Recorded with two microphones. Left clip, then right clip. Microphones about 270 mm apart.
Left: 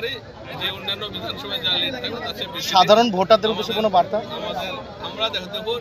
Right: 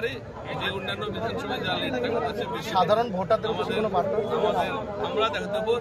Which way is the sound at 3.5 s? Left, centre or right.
Centre.